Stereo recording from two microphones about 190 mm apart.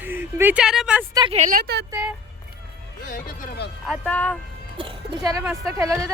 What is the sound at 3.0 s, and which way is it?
Speech, 50° left (ahead or behind).